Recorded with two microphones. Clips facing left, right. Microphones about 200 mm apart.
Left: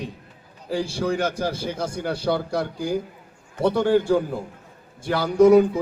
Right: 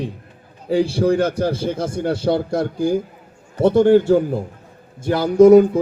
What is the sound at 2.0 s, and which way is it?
A man's voice, 25° right (ahead or behind).